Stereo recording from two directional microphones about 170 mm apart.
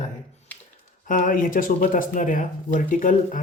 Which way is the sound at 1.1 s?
55° left (ahead or behind).